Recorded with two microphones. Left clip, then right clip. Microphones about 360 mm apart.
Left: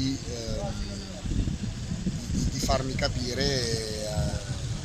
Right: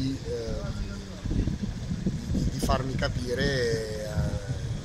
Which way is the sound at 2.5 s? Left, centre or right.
Centre.